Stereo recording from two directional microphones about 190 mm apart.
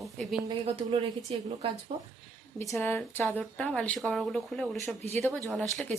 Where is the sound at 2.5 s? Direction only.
15° left (ahead or behind).